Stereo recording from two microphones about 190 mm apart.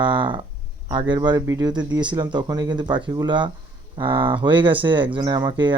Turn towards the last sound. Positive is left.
turn(degrees=-25)  # may be behind; listen again after turning